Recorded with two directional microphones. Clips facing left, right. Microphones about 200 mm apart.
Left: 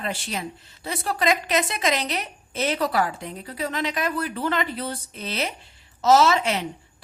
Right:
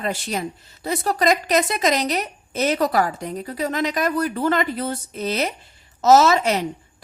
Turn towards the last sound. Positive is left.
turn(degrees=-40)  # may be behind; listen again after turning